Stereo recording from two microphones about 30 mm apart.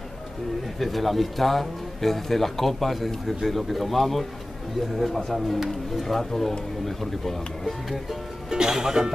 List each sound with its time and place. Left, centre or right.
0.7 s speech: centre
8.5 s speech: right